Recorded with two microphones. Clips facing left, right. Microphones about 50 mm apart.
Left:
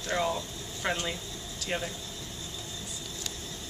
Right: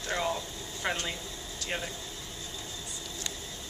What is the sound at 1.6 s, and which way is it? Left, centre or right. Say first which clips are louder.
Speech: left 2 dB; centre.